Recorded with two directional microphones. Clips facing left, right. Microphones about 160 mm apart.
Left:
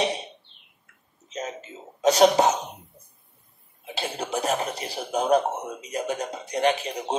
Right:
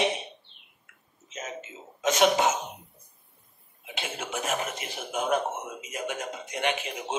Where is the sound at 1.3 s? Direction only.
35° left (ahead or behind).